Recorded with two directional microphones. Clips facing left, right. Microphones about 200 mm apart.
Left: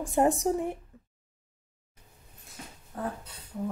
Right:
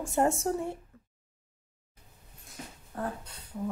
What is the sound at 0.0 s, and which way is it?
Speech, 15° left (ahead or behind).